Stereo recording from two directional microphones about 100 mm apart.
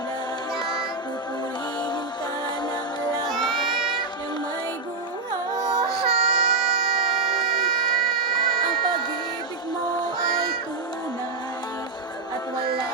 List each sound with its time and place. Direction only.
0.6 s music: 45° left (ahead or behind)
3.2 s child singing: centre (ahead or behind)
5.6 s music: 45° right (ahead or behind)
5.9 s a sound: 5° right (ahead or behind)